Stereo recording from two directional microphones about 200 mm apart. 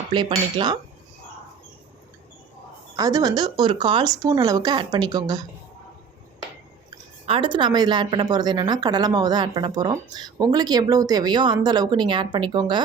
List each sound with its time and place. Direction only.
0.1 s a woman's voice: 25° right (ahead or behind)
2.9 s a woman's voice: 15° right (ahead or behind)
7.3 s a woman's voice: 25° right (ahead or behind)